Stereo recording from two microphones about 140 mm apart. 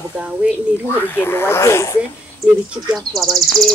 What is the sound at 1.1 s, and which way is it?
Speech, 15° left (ahead or behind).